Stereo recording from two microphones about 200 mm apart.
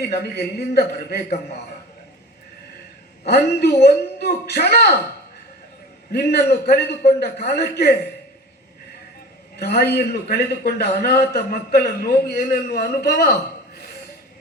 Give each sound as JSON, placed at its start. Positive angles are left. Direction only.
{"t": 0.0, "sound": "a man's voice", "side_deg": 55}
{"t": 3.2, "sound": "a man's voice", "side_deg": 55}
{"t": 6.1, "sound": "a man's voice", "side_deg": 50}
{"t": 9.6, "sound": "a man's voice", "side_deg": 50}